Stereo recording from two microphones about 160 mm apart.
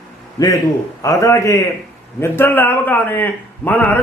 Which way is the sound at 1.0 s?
20° left (ahead or behind).